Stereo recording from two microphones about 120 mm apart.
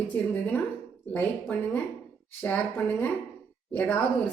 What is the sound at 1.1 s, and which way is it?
A woman's voice, 15° left (ahead or behind).